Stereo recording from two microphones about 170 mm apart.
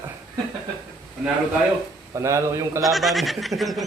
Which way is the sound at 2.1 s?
15° right (ahead or behind).